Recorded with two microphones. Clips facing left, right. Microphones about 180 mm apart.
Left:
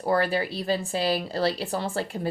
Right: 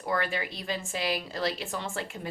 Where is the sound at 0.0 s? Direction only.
35° left (ahead or behind).